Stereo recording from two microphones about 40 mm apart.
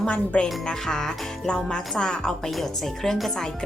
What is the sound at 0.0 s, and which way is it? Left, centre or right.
Speech, left.